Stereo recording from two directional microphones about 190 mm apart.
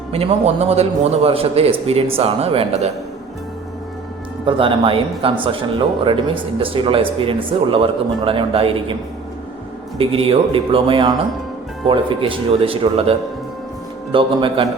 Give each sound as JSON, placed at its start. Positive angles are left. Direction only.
{"t": 0.1, "sound": "a man's voice", "side_deg": -30}
{"t": 4.4, "sound": "speech", "side_deg": -25}
{"t": 10.0, "sound": "speech", "side_deg": -30}